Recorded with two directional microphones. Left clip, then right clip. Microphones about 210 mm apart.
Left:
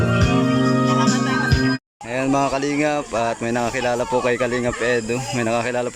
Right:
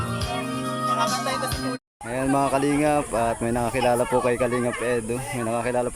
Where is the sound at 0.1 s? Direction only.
45° left (ahead or behind).